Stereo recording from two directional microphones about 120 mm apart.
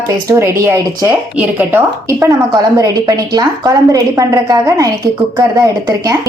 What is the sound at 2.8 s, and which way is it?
A woman's voice, 30° right (ahead or behind).